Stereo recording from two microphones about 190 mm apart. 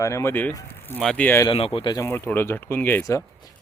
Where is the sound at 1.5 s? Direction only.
30° left (ahead or behind).